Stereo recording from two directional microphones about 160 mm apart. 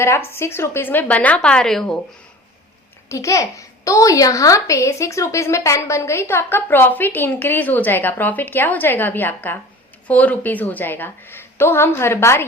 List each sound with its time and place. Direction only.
0.3 s a child's voice: 15° left (ahead or behind)
3.1 s a child's voice: 20° left (ahead or behind)